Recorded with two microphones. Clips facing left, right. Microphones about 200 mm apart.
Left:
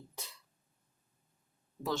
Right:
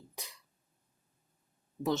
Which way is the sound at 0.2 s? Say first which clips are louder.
Right 1 dB; 15° right (ahead or behind).